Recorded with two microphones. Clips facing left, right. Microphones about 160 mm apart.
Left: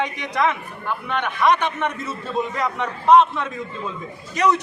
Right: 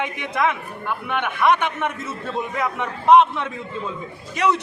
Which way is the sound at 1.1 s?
10° right (ahead or behind).